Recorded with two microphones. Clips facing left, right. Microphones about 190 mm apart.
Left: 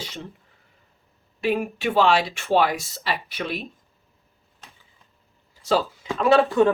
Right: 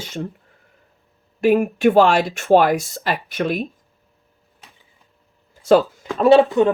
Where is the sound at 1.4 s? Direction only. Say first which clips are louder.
Right 8 dB; 50° right (ahead or behind).